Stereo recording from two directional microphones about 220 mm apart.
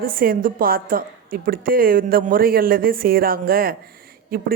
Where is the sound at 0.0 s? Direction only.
40° right (ahead or behind).